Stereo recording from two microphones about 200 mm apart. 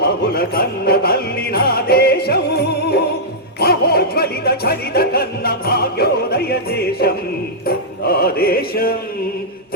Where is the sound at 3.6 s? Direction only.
50° left (ahead or behind).